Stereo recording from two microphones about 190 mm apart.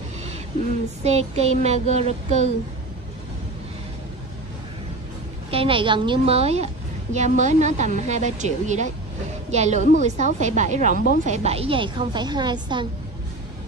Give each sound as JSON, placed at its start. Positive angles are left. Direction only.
{"t": 1.0, "sound": "a woman's voice", "side_deg": -35}
{"t": 5.5, "sound": "a woman's voice", "side_deg": -30}